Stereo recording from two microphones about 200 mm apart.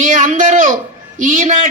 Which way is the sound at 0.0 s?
40° right (ahead or behind).